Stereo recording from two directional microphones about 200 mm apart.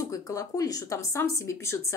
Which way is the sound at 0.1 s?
15° left (ahead or behind).